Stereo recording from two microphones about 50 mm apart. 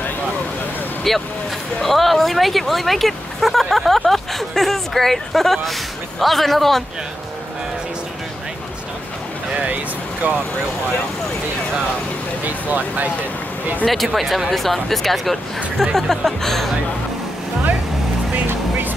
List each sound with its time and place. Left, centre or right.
1.1 s speech: centre
10.2 s speech: right
12.4 s speech: right
13.8 s speech: centre
18.5 s music: right